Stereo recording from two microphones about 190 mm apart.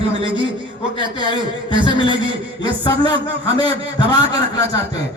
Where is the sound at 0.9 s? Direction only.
25° left (ahead or behind).